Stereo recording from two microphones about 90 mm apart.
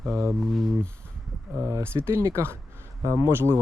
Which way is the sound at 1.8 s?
25° right (ahead or behind).